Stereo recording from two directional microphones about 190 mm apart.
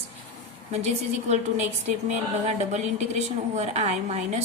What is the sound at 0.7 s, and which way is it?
A woman's voice, 35° right (ahead or behind).